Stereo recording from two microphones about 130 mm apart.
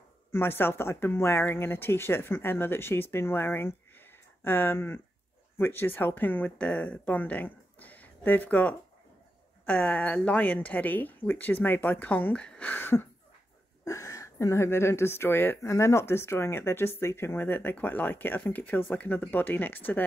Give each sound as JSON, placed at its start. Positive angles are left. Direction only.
{"t": 0.3, "sound": "speech", "side_deg": 15}